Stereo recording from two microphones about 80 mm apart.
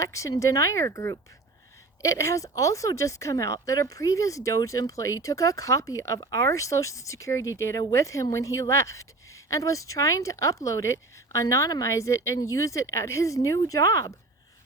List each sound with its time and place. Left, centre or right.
0.0 s speech: left